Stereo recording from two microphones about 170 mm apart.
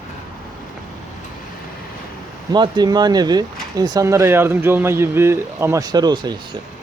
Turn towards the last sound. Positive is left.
turn(degrees=-25)  # may be behind; listen again after turning